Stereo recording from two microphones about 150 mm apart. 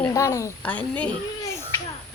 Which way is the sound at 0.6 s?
10° left (ahead or behind).